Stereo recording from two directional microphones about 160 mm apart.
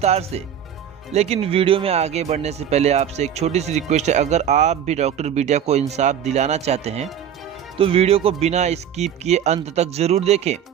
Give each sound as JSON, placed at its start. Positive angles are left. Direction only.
{"t": 0.0, "sound": "speech", "side_deg": -40}